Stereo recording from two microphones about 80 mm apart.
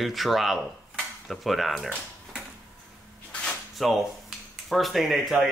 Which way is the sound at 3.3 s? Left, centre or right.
Centre.